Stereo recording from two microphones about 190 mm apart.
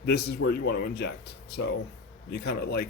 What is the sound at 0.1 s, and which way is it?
Speech, 55° left (ahead or behind).